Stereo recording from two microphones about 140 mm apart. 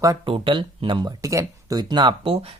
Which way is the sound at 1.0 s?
20° right (ahead or behind).